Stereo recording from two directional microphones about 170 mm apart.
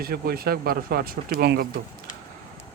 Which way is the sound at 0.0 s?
65° right (ahead or behind).